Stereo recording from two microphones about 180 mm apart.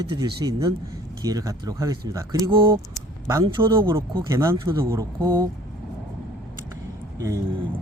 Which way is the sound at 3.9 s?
15° right (ahead or behind).